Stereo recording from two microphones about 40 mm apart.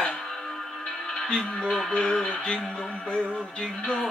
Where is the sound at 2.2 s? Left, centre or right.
Centre.